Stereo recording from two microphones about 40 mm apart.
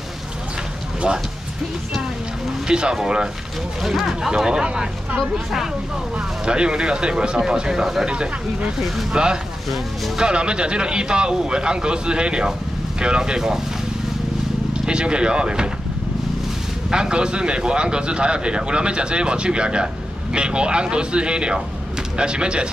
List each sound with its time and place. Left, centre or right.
1.0 s speech: right
2.7 s speech: right
8.7 s speech: centre
9.1 s speech: centre
14.7 s speech: right
16.9 s speech: right